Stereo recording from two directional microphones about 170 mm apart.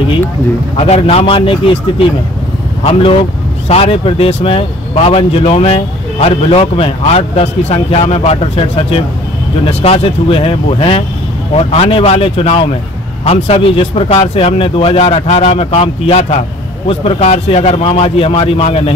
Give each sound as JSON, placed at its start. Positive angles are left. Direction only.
{"t": 0.7, "sound": "speech", "side_deg": 40}